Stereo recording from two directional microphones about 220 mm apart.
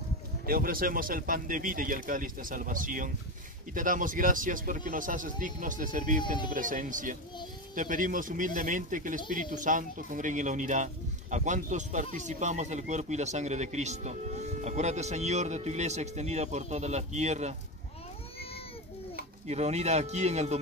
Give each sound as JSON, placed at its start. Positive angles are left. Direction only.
{"t": 0.5, "sound": "speech", "side_deg": -40}
{"t": 19.4, "sound": "speech", "side_deg": -30}